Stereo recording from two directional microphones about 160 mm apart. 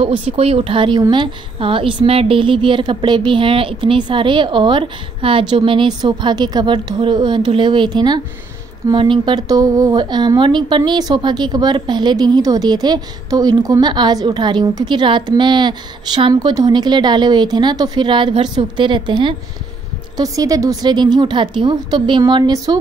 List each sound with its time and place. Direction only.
0.2 s a woman's voice: 35° right (ahead or behind)